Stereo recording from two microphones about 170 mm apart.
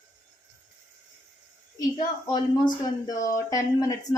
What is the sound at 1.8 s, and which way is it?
Speech, 25° left (ahead or behind).